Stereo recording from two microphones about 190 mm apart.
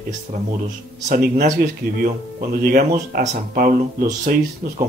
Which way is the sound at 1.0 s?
40° right (ahead or behind).